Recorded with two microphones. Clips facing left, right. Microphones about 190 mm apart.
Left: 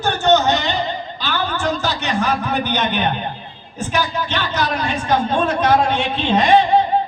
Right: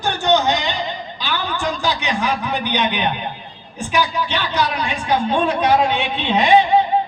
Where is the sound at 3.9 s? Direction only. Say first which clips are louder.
Right 1 dB; 15° right (ahead or behind).